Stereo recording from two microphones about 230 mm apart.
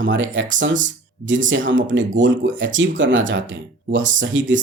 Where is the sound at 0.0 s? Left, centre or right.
Right.